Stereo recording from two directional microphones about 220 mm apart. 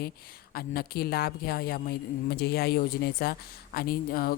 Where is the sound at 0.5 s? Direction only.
45° left (ahead or behind).